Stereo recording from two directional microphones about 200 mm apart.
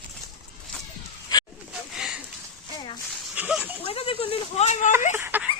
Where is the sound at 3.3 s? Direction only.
5° right (ahead or behind).